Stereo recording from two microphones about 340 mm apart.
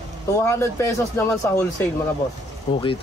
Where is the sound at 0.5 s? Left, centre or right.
Centre.